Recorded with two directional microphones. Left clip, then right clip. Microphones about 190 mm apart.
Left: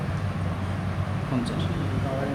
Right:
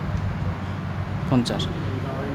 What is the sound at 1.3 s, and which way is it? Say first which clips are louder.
Speech: right 7 dB; 55° right (ahead or behind).